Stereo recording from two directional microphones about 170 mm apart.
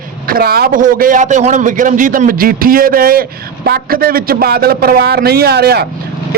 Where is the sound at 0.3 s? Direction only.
60° right (ahead or behind).